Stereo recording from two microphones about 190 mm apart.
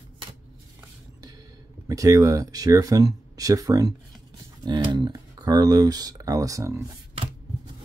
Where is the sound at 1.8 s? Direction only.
20° right (ahead or behind).